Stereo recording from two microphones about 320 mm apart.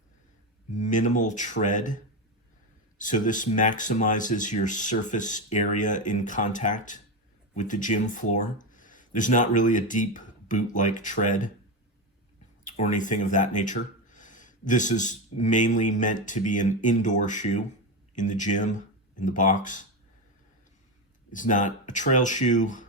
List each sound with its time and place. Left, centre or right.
0.7 s speech: left
3.0 s speech: left
12.6 s speech: left
21.2 s speech: left